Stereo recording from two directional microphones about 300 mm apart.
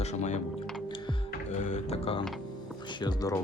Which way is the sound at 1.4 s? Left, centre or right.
Left.